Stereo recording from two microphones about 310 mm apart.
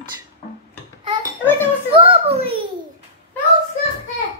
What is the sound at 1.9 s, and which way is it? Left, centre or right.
Speech, centre.